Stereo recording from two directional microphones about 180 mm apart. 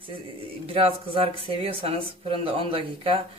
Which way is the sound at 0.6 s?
30° right (ahead or behind).